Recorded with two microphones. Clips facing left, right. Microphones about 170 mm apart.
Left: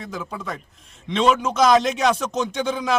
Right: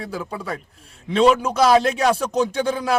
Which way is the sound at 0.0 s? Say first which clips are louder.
Right 2 dB; 10° right (ahead or behind).